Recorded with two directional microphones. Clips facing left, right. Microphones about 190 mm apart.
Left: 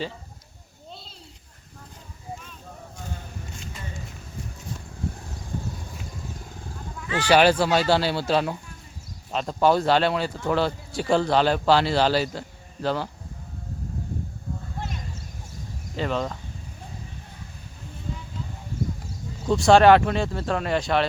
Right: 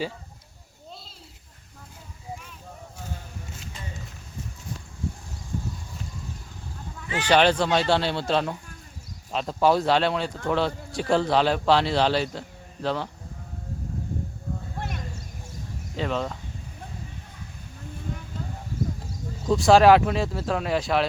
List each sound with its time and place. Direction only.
7.3 s speech: 5° left (ahead or behind)
14.8 s a sound: 60° right (ahead or behind)
16.0 s speech: centre (ahead or behind)
19.5 s speech: centre (ahead or behind)